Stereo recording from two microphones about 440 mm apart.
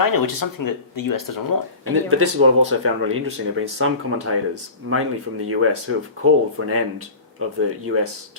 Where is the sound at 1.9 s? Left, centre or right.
Right.